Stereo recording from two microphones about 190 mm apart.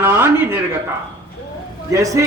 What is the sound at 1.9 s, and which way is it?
Speech, 15° right (ahead or behind).